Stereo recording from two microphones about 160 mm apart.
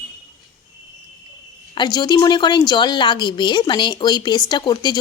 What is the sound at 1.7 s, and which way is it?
A woman's voice, 25° left (ahead or behind).